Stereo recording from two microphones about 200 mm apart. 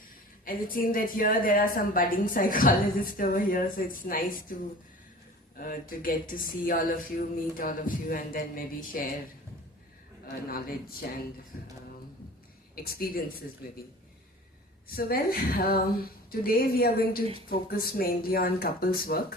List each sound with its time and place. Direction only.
0.4 s a woman's voice: 45° left (ahead or behind)
5.5 s a woman's voice: 45° left (ahead or behind)
11.5 s a woman's voice: 45° left (ahead or behind)
12.7 s a woman's voice: 50° left (ahead or behind)
14.8 s a woman's voice: 50° left (ahead or behind)